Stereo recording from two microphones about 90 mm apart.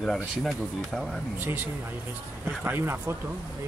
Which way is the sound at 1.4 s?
20° right (ahead or behind).